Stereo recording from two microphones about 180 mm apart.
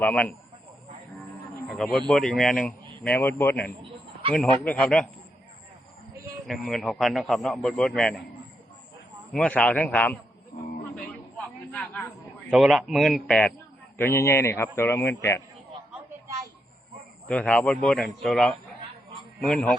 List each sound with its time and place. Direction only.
0.0 s a man's voice: 10° left (ahead or behind)
1.6 s a man's voice: centre (ahead or behind)
6.5 s a man's voice: centre (ahead or behind)
9.3 s a man's voice: 5° left (ahead or behind)
10.5 s a sound: 45° left (ahead or behind)
10.9 s a sound: 5° left (ahead or behind)
12.5 s a man's voice: centre (ahead or behind)
14.0 s a man's voice: 15° left (ahead or behind)
17.2 s a man's voice: 5° left (ahead or behind)